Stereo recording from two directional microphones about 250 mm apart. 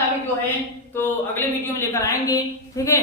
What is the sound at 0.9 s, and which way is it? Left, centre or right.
A woman's voice, centre.